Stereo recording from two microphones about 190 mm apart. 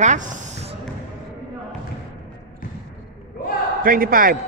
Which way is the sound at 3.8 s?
50° right (ahead or behind).